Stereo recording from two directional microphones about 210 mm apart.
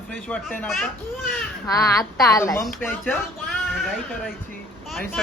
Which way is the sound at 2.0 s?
Centre (ahead or behind).